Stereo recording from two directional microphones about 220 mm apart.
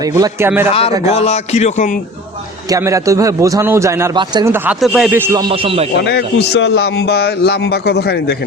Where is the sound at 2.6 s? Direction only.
15° right (ahead or behind).